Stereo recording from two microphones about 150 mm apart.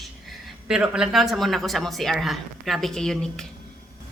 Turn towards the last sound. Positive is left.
turn(degrees=5)  # may be behind; listen again after turning